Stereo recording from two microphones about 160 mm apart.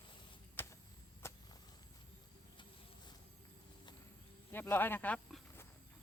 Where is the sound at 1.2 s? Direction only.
15° left (ahead or behind).